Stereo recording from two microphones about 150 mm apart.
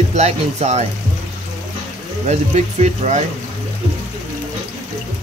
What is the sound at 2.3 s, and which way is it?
Speech, 50° right (ahead or behind).